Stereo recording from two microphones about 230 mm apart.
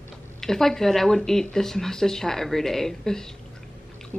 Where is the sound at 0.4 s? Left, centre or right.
Centre.